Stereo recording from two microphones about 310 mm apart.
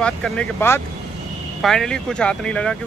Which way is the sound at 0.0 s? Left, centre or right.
Centre.